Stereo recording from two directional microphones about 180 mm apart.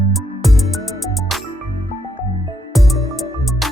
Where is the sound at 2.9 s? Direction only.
Centre (ahead or behind).